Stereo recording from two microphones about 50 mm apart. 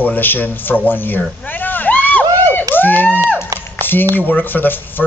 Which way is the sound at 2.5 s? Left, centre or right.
Left.